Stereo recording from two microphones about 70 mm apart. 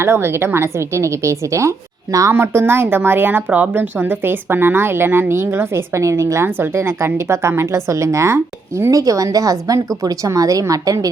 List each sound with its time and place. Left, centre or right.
0.0 s speech: right
2.3 s speech: right